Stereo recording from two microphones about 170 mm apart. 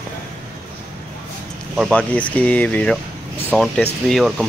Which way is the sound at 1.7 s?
5° left (ahead or behind).